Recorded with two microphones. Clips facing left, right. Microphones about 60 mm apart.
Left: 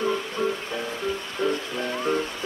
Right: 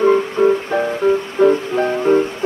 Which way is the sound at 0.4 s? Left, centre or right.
Right.